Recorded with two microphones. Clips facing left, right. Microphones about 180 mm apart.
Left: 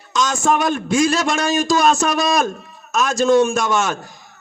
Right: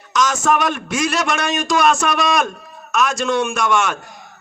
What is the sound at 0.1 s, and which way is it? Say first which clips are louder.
A man's voice: right 1 dB; 30° left (ahead or behind).